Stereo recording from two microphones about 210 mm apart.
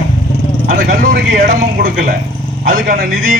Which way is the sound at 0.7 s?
45° right (ahead or behind).